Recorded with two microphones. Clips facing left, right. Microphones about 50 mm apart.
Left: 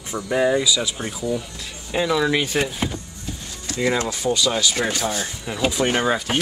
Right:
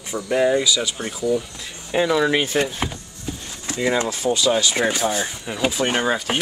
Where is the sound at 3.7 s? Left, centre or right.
Right.